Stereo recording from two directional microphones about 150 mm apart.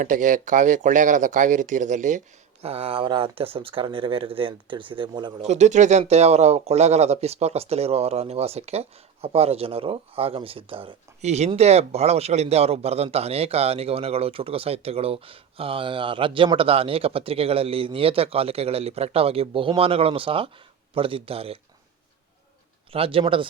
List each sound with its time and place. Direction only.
0.0 s speech: 60° right (ahead or behind)
2.6 s speech: 40° right (ahead or behind)
5.4 s speech: 50° right (ahead or behind)
22.9 s speech: 40° right (ahead or behind)